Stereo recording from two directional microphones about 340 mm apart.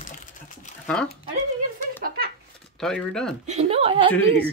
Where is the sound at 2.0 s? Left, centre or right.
Right.